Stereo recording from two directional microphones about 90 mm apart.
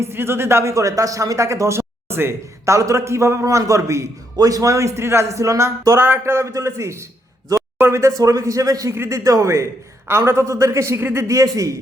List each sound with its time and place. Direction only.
0.0 s speech: 25° right (ahead or behind)